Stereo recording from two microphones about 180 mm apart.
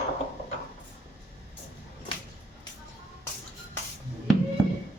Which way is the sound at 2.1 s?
30° left (ahead or behind).